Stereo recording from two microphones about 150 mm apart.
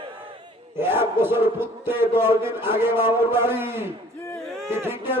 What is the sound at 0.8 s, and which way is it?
A man's voice, 15° right (ahead or behind).